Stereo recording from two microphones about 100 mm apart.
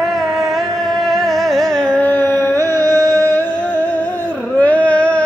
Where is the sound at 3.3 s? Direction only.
20° left (ahead or behind).